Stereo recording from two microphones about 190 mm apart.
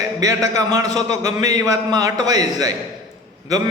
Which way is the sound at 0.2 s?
15° right (ahead or behind).